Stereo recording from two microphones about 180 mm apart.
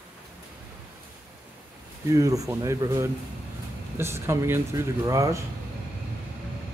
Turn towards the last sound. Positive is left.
turn(degrees=-20)  # may be behind; listen again after turning